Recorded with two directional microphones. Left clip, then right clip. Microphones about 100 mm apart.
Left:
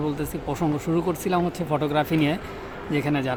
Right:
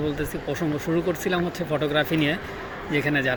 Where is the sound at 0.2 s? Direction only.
65° left (ahead or behind).